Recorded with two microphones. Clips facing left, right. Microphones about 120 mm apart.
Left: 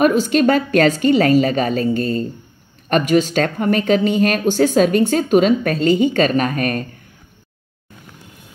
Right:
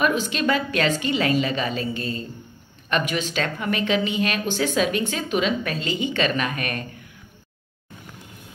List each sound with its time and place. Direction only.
0.0 s speech: 45° left (ahead or behind)